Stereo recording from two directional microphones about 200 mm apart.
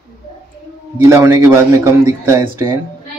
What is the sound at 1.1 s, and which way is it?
A man's voice, 15° right (ahead or behind).